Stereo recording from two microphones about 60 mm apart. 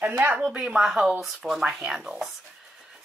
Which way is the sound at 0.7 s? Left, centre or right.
Centre.